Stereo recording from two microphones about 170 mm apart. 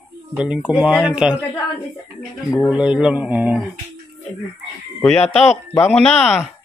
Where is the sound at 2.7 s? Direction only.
5° right (ahead or behind).